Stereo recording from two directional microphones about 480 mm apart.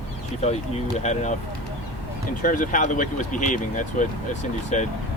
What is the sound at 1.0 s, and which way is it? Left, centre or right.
Speech, centre.